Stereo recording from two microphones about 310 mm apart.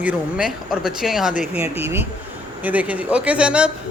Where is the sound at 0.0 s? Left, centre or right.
Centre.